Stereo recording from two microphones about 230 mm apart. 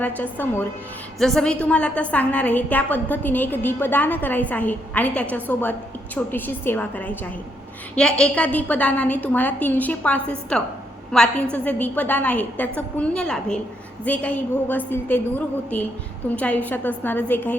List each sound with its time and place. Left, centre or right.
0.0 s a woman's voice: centre